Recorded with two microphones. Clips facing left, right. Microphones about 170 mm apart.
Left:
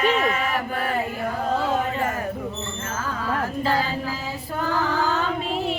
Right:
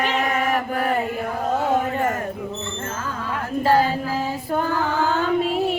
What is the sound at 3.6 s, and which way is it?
Music, 50° right (ahead or behind).